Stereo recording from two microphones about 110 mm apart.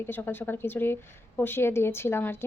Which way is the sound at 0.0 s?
20° left (ahead or behind).